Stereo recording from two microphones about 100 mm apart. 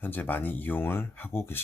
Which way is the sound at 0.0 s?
20° left (ahead or behind).